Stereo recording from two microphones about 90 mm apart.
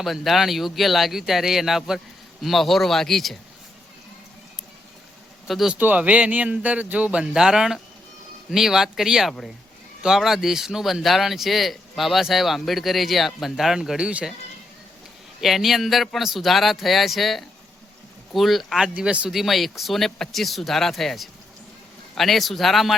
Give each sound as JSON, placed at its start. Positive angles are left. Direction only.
{"t": 0.0, "sound": "speech", "side_deg": 0}
{"t": 5.5, "sound": "speech", "side_deg": 0}
{"t": 5.7, "sound": "speech", "side_deg": -20}
{"t": 15.4, "sound": "speech", "side_deg": 0}
{"t": 18.9, "sound": "speech", "side_deg": -15}
{"t": 19.3, "sound": "speech", "side_deg": 0}